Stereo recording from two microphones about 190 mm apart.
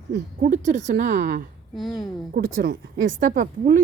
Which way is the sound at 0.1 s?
40° right (ahead or behind).